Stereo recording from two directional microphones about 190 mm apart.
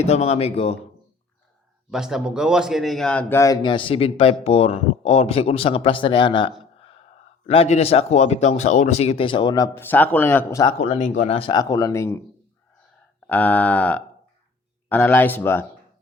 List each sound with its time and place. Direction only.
0.0 s speech: 35° left (ahead or behind)
1.9 s a man's voice: 5° right (ahead or behind); by 9.6 s 25° left (ahead or behind)
9.7 s speech: 10° left (ahead or behind)
10.8 s a man's voice: 35° left (ahead or behind); by 12.2 s 15° left (ahead or behind)
13.2 s speech: 10° left (ahead or behind)